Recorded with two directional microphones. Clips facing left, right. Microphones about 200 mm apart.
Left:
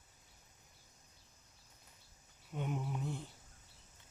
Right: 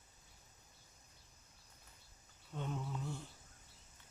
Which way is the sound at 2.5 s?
15° left (ahead or behind).